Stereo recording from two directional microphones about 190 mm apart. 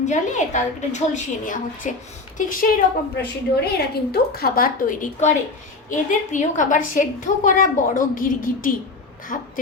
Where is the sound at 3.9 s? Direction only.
55° left (ahead or behind).